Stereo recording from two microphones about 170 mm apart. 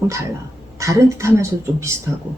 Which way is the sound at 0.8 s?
15° right (ahead or behind).